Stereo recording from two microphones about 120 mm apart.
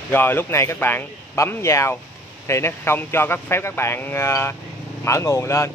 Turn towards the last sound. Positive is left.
turn(degrees=25)  # may be behind; listen again after turning